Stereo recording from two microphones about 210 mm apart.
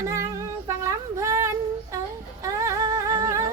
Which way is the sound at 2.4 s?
15° right (ahead or behind).